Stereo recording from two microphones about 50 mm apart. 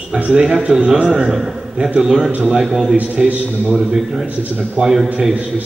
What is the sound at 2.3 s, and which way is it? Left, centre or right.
Speech, right.